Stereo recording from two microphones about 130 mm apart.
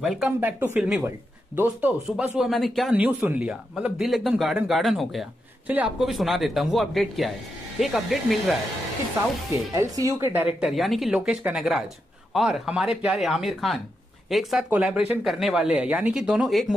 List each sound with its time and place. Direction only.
0.0 s speech: centre (ahead or behind)
0.4 s a man's voice: 15° right (ahead or behind)
0.7 s a man's voice: 5° right (ahead or behind)
2.9 s a man's voice: 10° right (ahead or behind)
5.7 s a man's voice: 15° right (ahead or behind)
6.0 s speech: centre (ahead or behind)
9.7 s speech: 25° right (ahead or behind)
10.3 s a man's voice: 10° right (ahead or behind)
10.7 s a man's voice: centre (ahead or behind)